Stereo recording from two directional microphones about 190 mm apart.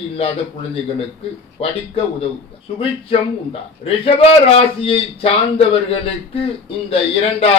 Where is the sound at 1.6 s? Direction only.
30° left (ahead or behind).